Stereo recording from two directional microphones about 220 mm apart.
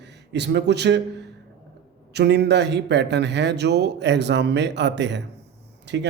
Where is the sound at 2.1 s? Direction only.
50° right (ahead or behind).